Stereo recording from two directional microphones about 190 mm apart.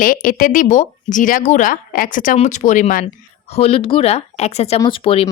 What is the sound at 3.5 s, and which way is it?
Speech, 30° left (ahead or behind).